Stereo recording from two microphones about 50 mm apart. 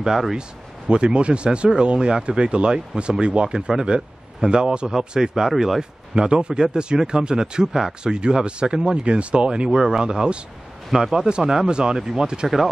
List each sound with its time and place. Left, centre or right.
0.0 s speech: centre
0.8 s speech: right